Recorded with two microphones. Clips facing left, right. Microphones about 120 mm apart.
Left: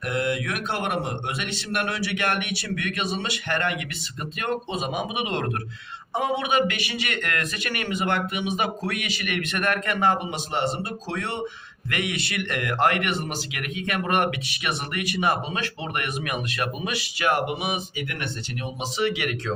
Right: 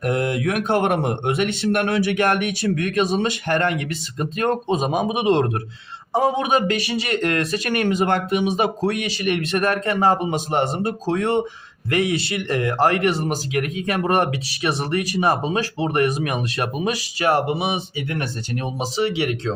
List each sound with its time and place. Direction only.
0.0 s speech: 40° right (ahead or behind)
11.9 s speech: 30° right (ahead or behind)